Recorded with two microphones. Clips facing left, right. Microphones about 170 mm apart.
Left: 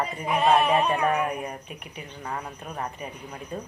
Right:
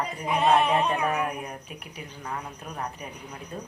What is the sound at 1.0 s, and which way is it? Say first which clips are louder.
Speech: left 3 dB; centre (ahead or behind).